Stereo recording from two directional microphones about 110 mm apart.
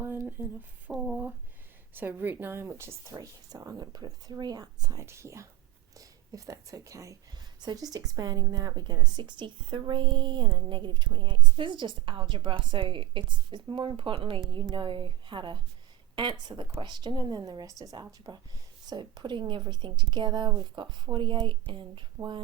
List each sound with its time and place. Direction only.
0.0 s a sound: 20° right (ahead or behind)
0.9 s speech: 5° right (ahead or behind)
1.9 s a woman's voice: 20° right (ahead or behind); by 22.0 s 50° right (ahead or behind)